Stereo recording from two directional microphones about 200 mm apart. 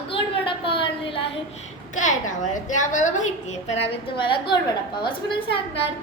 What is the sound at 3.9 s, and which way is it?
A woman's voice, 25° left (ahead or behind).